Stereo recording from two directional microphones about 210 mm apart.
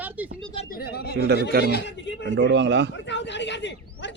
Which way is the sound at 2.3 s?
55° right (ahead or behind).